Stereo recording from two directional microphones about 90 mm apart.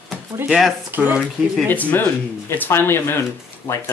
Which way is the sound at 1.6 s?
20° left (ahead or behind).